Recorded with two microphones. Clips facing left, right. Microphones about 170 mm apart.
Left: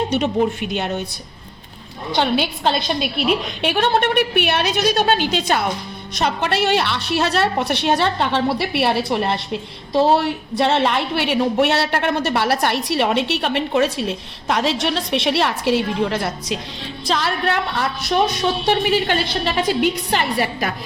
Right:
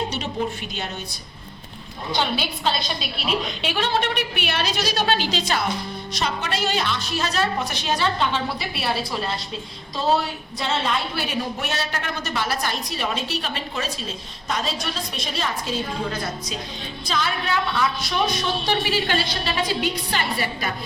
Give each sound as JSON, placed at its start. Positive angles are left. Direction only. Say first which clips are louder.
{"t": 0.1, "sound": "a woman's voice", "louder": "left 8 dB", "side_deg": 55}
{"t": 2.1, "sound": "a woman's voice", "louder": "left 6 dB", "side_deg": 55}
{"t": 18.7, "sound": "a woman's voice", "louder": "left 5 dB", "side_deg": 50}